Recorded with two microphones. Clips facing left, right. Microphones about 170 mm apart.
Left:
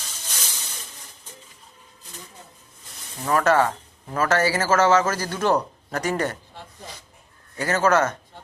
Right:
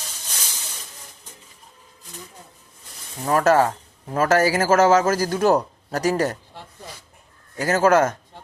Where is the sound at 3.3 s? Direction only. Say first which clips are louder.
Right 2 dB; 40° right (ahead or behind).